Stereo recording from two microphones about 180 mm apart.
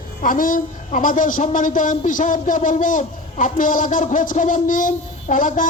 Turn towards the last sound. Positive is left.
turn(degrees=45)  # may be behind; listen again after turning